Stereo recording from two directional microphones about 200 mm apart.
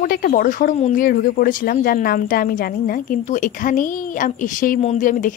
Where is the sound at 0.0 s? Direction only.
45° left (ahead or behind).